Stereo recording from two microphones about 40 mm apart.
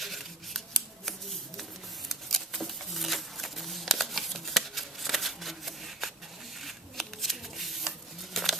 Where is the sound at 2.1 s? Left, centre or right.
Centre.